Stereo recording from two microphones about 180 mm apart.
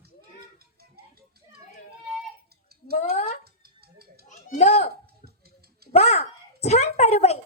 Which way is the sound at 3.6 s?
60° right (ahead or behind).